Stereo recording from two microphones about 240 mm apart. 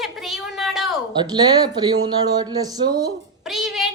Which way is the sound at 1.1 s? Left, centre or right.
Centre.